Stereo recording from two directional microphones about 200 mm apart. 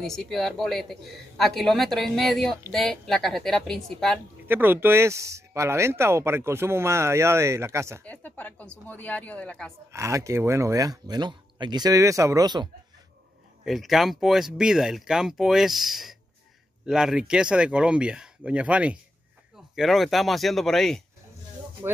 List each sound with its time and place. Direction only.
0.0 s speech: centre (ahead or behind)
4.5 s speech: 10° right (ahead or behind)
8.0 s speech: 5° left (ahead or behind)
9.9 s speech: 15° right (ahead or behind)
13.7 s speech: centre (ahead or behind)